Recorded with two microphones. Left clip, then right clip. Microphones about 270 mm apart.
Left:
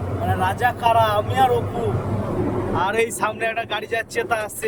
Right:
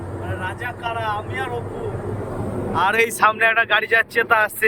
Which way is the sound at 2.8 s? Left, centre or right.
Centre.